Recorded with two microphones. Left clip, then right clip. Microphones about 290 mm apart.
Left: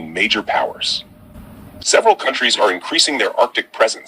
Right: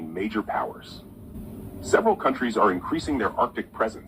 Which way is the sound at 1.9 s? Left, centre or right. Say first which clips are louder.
Left 8 dB; left.